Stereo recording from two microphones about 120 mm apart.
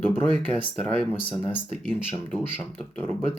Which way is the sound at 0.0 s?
15° left (ahead or behind).